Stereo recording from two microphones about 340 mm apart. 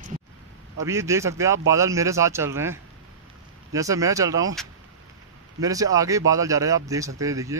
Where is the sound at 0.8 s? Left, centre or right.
Centre.